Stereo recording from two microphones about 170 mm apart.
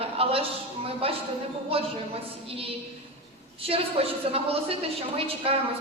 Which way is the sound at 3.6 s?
35° right (ahead or behind).